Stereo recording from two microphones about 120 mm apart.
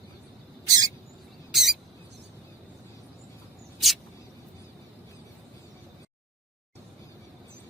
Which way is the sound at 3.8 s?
Centre (ahead or behind).